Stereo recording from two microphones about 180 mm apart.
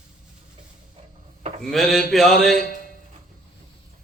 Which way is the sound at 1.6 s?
Centre (ahead or behind).